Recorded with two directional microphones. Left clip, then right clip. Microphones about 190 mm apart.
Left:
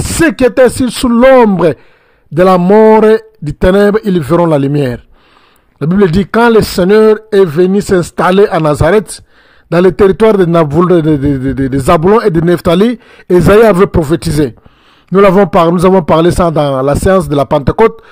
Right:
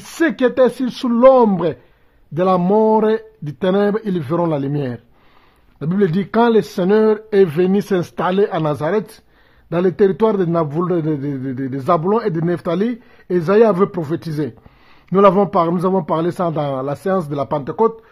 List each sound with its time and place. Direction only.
0.2 s a man's voice: 25° left (ahead or behind)